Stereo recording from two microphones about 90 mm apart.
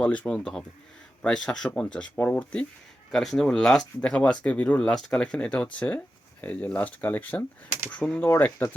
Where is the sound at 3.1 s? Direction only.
Centre (ahead or behind).